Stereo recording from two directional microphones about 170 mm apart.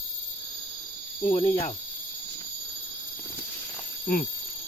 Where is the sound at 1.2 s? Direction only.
40° left (ahead or behind).